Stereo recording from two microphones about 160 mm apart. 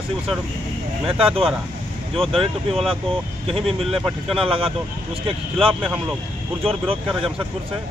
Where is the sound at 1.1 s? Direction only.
35° right (ahead or behind).